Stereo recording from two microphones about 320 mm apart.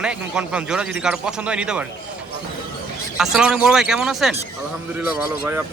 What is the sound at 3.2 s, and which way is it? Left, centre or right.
Speech, centre.